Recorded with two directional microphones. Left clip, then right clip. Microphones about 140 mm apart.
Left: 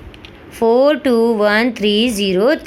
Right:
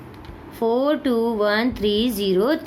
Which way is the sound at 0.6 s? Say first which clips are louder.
Left 8 dB; 40° left (ahead or behind).